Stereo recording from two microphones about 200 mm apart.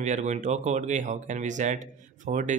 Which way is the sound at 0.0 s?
35° right (ahead or behind).